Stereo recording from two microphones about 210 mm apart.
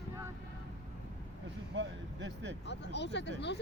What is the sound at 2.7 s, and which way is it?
Speech, 55° left (ahead or behind).